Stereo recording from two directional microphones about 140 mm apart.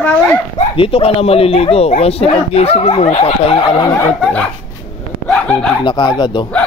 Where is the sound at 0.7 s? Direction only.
45° left (ahead or behind).